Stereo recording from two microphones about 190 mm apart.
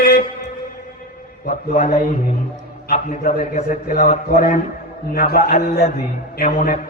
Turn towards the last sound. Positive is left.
turn(degrees=45)  # may be behind; listen again after turning